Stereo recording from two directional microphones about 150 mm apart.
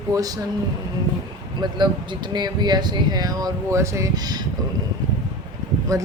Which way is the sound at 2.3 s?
30° right (ahead or behind).